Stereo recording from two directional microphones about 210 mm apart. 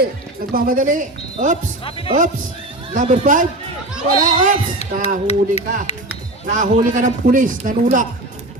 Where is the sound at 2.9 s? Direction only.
35° right (ahead or behind).